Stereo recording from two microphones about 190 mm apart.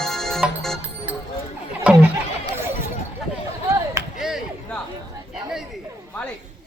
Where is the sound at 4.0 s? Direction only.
15° right (ahead or behind).